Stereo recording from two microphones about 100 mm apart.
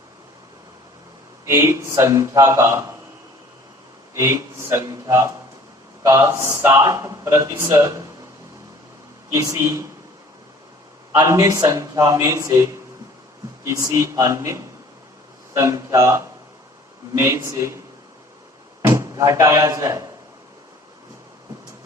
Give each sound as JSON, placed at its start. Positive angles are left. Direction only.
{"t": 1.5, "sound": "speech", "side_deg": -30}
{"t": 4.1, "sound": "speech", "side_deg": -30}
{"t": 9.3, "sound": "speech", "side_deg": -30}
{"t": 11.3, "sound": "speech", "side_deg": -35}
{"t": 13.7, "sound": "speech", "side_deg": -30}
{"t": 18.8, "sound": "speech", "side_deg": -30}